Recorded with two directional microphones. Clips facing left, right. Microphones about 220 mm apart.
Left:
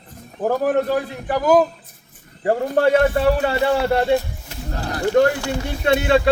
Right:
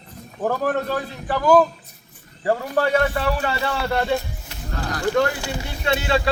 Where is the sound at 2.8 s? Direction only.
40° left (ahead or behind).